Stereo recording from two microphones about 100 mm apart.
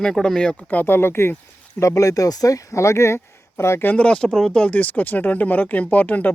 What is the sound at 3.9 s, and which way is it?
Speech, 10° left (ahead or behind).